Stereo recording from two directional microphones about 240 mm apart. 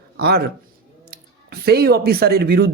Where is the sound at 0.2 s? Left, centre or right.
Right.